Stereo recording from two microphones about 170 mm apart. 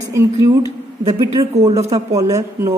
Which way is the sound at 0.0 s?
15° right (ahead or behind).